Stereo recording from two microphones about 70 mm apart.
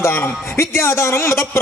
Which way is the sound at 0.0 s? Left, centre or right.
Left.